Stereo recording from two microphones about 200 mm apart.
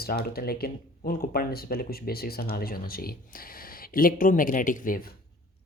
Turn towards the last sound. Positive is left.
turn(degrees=45)  # may be behind; listen again after turning